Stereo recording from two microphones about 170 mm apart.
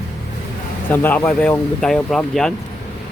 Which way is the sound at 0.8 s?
10° left (ahead or behind).